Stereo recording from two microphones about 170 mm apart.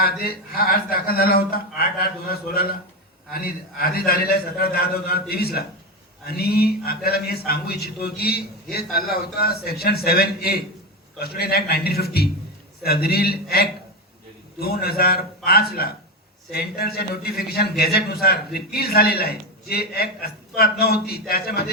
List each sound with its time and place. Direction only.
0.0 s a man's voice: 60° left (ahead or behind)